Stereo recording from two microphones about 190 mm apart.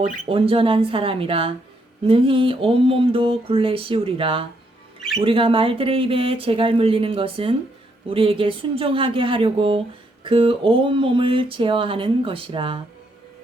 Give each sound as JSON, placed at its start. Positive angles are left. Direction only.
{"t": 0.3, "sound": "speech", "side_deg": -30}